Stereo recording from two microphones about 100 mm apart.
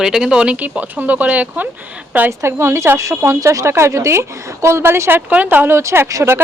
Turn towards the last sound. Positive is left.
turn(degrees=-30)  # may be behind; listen again after turning